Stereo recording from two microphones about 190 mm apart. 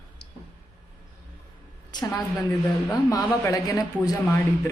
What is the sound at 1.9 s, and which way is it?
A woman's voice, 20° left (ahead or behind).